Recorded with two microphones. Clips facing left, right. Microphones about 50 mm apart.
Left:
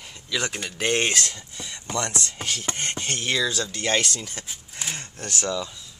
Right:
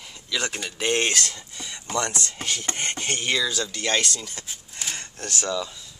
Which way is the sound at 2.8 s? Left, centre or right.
Centre.